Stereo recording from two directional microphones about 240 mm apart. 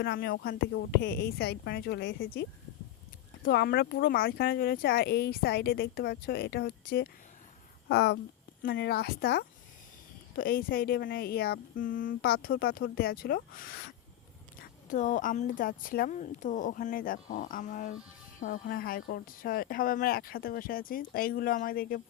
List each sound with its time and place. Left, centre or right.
0.0 s speech: left